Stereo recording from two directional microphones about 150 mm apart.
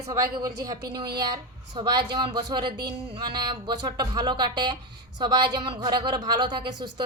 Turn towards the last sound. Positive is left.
turn(degrees=-30)  # may be behind; listen again after turning